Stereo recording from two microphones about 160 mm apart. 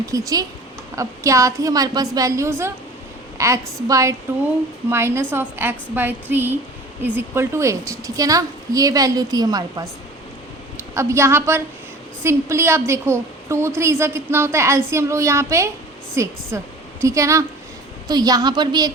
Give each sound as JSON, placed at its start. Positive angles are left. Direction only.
{"t": 0.0, "sound": "a woman's voice", "side_deg": -20}
{"t": 10.9, "sound": "a woman's voice", "side_deg": -15}